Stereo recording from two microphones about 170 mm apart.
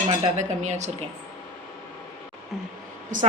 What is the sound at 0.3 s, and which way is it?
Speech, 40° right (ahead or behind).